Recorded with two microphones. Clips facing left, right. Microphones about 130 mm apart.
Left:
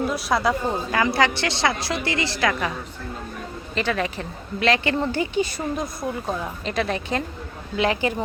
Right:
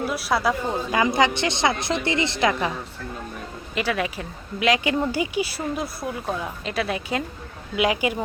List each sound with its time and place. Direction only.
0.0 s a woman's voice: 5° right (ahead or behind)
0.9 s a woman's voice: 20° right (ahead or behind)
3.8 s a woman's voice: 10° right (ahead or behind)